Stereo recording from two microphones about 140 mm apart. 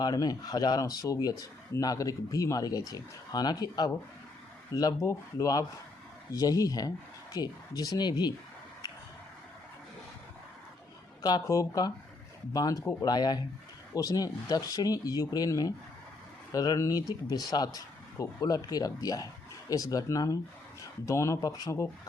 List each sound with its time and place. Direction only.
0.0 s speech: 25° left (ahead or behind)
11.2 s speech: 25° left (ahead or behind)